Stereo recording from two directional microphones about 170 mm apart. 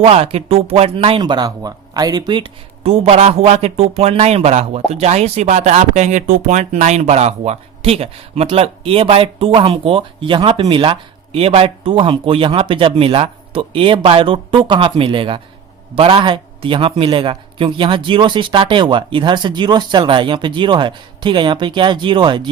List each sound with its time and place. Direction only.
0.0 s a man's voice: 35° right (ahead or behind)